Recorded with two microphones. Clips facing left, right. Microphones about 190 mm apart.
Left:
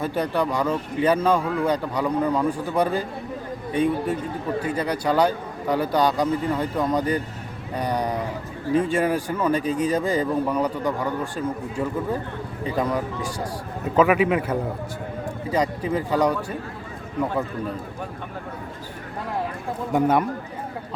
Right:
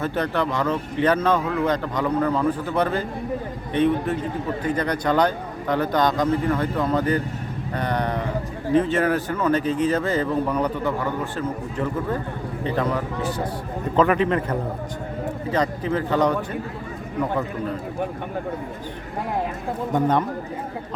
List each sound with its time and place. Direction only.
0.0 s speech: 10° left (ahead or behind)
19.9 s speech: 10° left (ahead or behind)